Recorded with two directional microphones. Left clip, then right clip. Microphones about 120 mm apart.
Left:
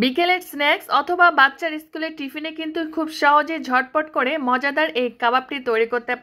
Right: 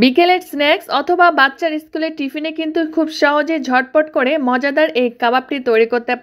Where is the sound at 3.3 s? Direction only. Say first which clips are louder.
Right 2 dB; 30° right (ahead or behind).